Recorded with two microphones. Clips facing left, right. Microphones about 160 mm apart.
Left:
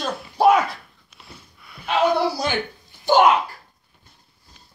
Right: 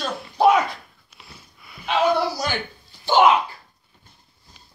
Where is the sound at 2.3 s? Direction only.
20° left (ahead or behind).